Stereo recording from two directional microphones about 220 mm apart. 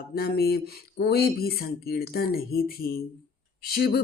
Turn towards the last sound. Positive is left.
turn(degrees=45)  # may be behind; listen again after turning